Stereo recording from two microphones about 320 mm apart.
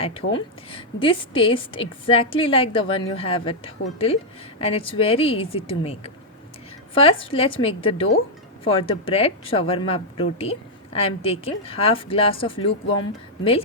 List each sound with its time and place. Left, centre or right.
0.0 s speech: centre